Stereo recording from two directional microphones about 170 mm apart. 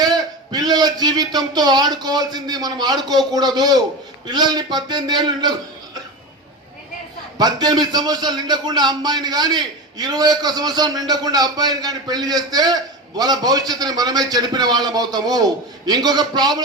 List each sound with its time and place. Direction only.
0.0 s a man's voice: 20° right (ahead or behind)
7.3 s a man's voice: 25° right (ahead or behind)